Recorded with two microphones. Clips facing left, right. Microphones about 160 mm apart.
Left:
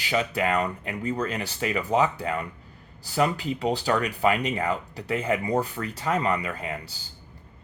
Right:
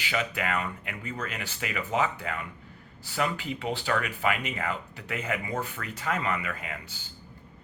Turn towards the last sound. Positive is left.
turn(degrees=35)  # may be behind; listen again after turning